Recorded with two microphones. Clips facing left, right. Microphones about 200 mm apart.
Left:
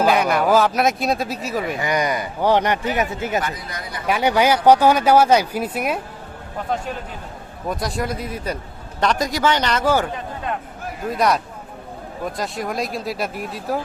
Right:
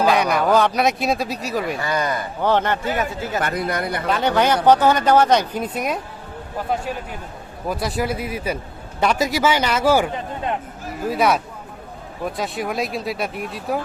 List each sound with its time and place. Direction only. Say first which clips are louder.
0.0 s speech: even; centre (ahead or behind)
1.8 s speech: left 1 dB; 15° left (ahead or behind)
3.4 s speech: right 7 dB; 60° right (ahead or behind)
4.0 s speech: left 2 dB; 10° left (ahead or behind)
7.7 s speech: right 1 dB; 5° right (ahead or behind)
11.1 s speech: right 1 dB; 5° right (ahead or behind)
12.4 s speech: right 1 dB; centre (ahead or behind)